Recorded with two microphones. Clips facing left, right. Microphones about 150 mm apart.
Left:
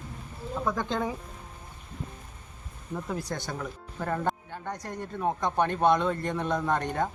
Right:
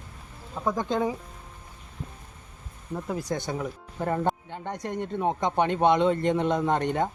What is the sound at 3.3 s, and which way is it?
Speech, 20° right (ahead or behind).